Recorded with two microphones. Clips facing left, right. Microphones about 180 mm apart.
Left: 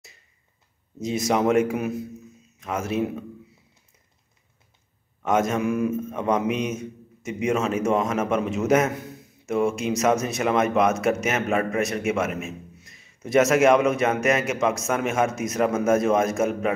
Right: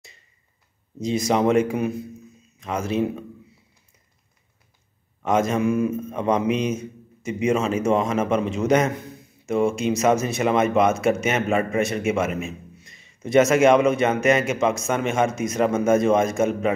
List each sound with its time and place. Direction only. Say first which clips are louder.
0.9 s a man's voice: right 2 dB; centre (ahead or behind)
5.2 s a man's voice: right 2 dB; centre (ahead or behind)